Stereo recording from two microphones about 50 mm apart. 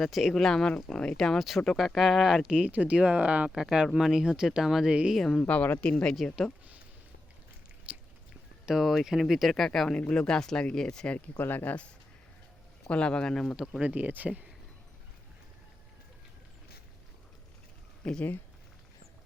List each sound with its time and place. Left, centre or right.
0.0 s speech: centre
0.3 s speech: centre
2.5 s speech: right
3.5 s speech: centre
5.4 s speech: left
5.8 s speech: left
7.9 s biting: right
8.6 s speech: centre
9.9 s speech: left
11.3 s speech: left
12.9 s speech: left
13.3 s speech: centre
13.8 s speech: right
18.0 s speech: left